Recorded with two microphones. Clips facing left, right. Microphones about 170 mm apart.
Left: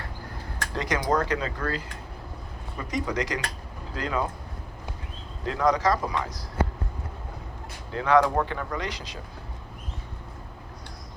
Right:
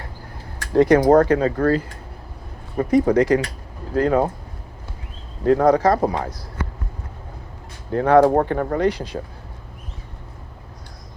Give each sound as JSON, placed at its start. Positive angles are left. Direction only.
{"t": 0.7, "sound": "speech", "side_deg": -55}
{"t": 5.5, "sound": "speech", "side_deg": -55}
{"t": 7.9, "sound": "speech", "side_deg": -50}